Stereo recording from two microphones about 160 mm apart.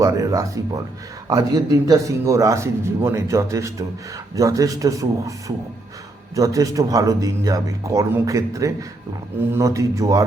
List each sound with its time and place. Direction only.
0.0 s speech: 20° right (ahead or behind)